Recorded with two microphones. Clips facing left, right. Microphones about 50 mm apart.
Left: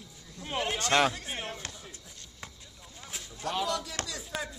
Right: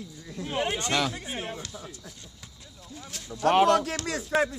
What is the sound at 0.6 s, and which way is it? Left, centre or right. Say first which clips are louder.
Speech: right 2 dB; right.